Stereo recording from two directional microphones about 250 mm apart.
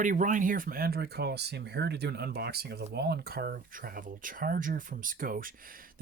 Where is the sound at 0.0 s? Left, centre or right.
Right.